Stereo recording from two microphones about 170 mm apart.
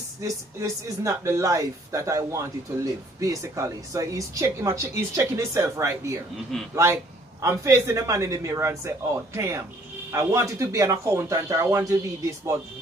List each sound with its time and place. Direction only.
0.2 s a woman's voice: 20° right (ahead or behind)